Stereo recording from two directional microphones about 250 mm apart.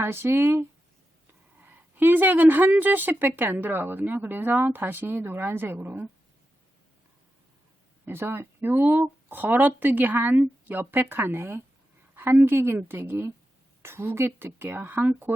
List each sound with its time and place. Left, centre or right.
0.0 s speech: centre
8.0 s speech: centre